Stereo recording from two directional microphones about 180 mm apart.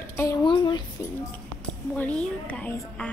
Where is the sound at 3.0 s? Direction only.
10° left (ahead or behind).